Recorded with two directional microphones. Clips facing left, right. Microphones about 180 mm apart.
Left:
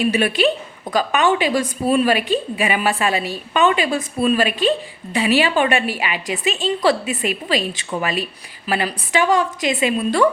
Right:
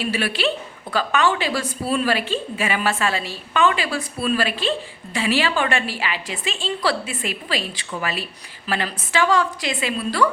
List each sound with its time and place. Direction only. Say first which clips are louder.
0.0 s a woman's voice: left 6 dB; 20° left (ahead or behind)